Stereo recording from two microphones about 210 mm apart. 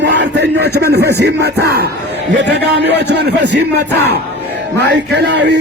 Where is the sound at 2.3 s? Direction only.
55° right (ahead or behind).